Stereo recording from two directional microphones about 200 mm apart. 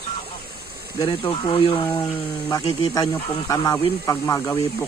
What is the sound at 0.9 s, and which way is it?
Speech, 25° left (ahead or behind).